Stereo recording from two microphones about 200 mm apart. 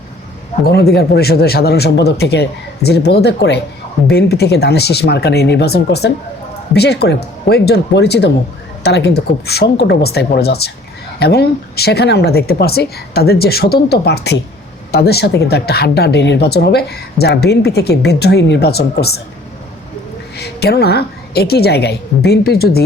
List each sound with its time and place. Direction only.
0.6 s speech: 55° left (ahead or behind)
20.3 s speech: 55° left (ahead or behind)